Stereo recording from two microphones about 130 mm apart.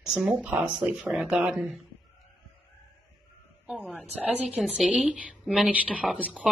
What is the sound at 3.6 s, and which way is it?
A woman's voice, 5° right (ahead or behind).